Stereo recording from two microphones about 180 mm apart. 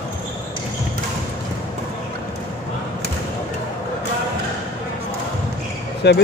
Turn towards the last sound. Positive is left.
turn(degrees=65)  # may be behind; listen again after turning